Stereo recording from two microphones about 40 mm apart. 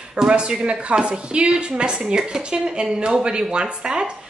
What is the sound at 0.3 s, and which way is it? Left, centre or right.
A woman's voice, right.